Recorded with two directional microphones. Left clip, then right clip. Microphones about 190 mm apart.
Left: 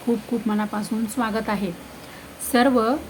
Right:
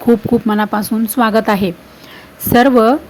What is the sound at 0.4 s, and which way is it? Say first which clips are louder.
A woman's voice: right 10 dB; 30° right (ahead or behind).